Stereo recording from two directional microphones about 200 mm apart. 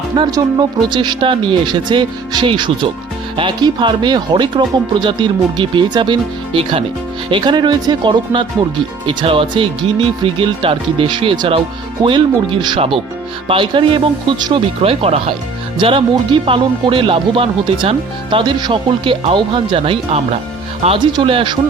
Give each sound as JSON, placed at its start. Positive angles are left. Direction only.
{"t": 0.2, "sound": "speech", "side_deg": -20}